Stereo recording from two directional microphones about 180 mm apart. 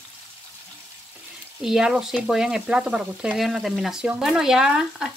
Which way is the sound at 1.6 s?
5° right (ahead or behind).